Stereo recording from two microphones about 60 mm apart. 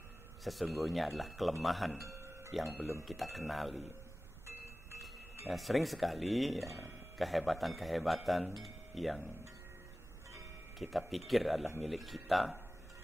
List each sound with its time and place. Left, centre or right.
0.4 s a man's voice: centre
2.0 s music: right
2.5 s a man's voice: centre
5.5 s a man's voice: centre
10.8 s a man's voice: centre